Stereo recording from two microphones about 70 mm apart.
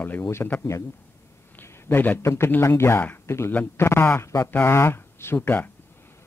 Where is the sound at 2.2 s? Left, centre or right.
Left.